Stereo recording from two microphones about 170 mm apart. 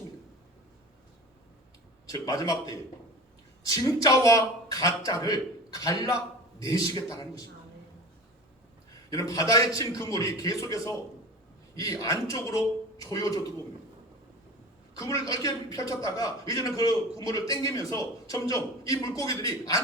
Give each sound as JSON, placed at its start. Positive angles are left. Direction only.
{"t": 2.0, "sound": "a man's voice", "side_deg": 20}
{"t": 9.0, "sound": "a man's voice", "side_deg": 20}
{"t": 14.9, "sound": "a man's voice", "side_deg": 20}